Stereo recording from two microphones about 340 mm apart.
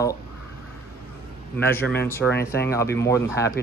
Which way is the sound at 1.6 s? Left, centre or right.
Centre.